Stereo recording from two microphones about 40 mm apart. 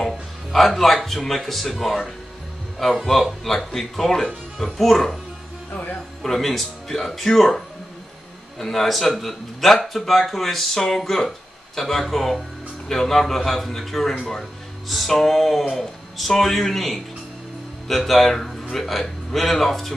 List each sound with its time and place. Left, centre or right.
0.0 s speech: centre
5.7 s speech: left
6.2 s a man's voice: centre